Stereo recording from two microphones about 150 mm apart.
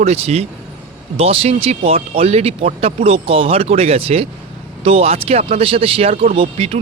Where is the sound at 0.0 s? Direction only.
45° right (ahead or behind).